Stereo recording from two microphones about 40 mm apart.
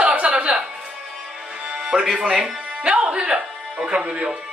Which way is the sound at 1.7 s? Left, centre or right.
Right.